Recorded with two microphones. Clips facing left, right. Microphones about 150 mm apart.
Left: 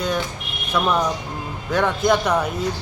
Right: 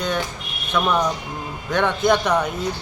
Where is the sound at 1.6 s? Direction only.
5° left (ahead or behind).